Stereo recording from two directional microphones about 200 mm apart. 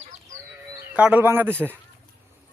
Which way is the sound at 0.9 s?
5° right (ahead or behind).